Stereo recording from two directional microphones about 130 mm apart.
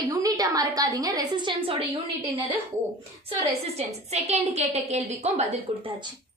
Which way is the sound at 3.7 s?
55° right (ahead or behind).